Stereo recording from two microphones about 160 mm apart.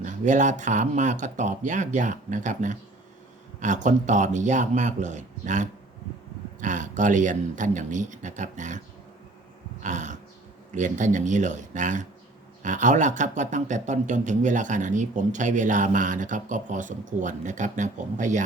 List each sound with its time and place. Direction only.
0.0 s speech: 50° right (ahead or behind)
9.8 s a sound: 50° right (ahead or behind)
10.8 s speech: 50° right (ahead or behind)